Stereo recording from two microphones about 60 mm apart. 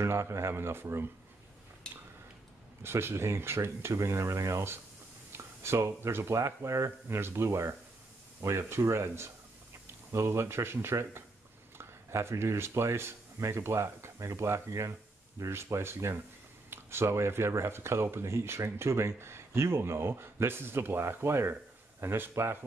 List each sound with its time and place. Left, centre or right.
0.0 s speech: right
2.8 s speech: right
5.3 s speech: right
15.8 s speech: right